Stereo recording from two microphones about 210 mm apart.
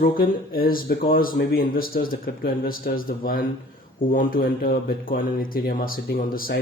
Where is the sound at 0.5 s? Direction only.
45° left (ahead or behind).